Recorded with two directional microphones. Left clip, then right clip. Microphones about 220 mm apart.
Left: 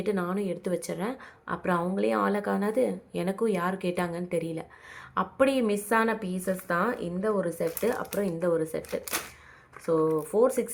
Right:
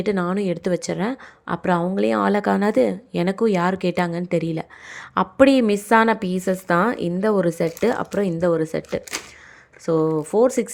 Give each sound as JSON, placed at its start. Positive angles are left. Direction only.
{"t": 0.0, "sound": "a woman's voice", "side_deg": -30}